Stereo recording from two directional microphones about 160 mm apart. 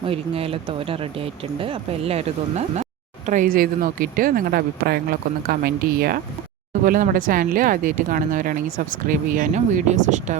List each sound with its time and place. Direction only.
0.0 s speech: 35° right (ahead or behind)
3.2 s speech: 55° right (ahead or behind); by 6.1 s 70° right (ahead or behind)
6.8 s speech: 60° right (ahead or behind)